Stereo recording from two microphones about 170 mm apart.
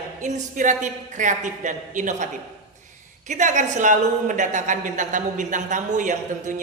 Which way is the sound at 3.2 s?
45° right (ahead or behind).